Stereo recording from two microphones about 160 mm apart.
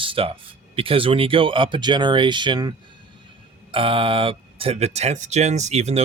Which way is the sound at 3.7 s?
35° right (ahead or behind).